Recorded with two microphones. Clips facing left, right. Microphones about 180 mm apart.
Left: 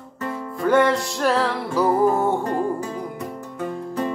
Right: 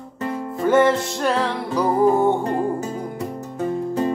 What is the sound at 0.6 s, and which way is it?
Music, 5° right (ahead or behind).